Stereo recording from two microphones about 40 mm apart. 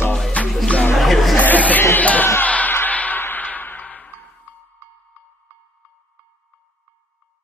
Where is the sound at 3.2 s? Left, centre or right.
Left.